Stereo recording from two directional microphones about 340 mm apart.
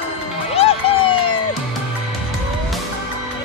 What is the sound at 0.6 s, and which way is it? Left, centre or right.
Music, centre.